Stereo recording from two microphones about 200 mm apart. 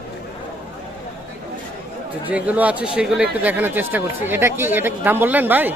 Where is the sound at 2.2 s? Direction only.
5° right (ahead or behind).